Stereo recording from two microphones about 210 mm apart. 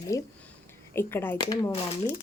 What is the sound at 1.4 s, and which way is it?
Speech, 20° left (ahead or behind).